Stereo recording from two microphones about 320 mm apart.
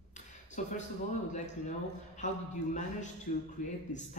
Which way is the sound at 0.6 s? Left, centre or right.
Left.